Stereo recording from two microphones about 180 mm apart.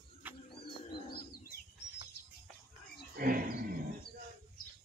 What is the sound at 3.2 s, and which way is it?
Wild animals, 55° right (ahead or behind).